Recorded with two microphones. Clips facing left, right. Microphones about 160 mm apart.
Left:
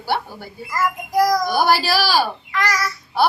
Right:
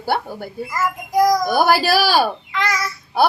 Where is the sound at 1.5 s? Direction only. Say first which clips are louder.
Right 2 dB; 50° right (ahead or behind).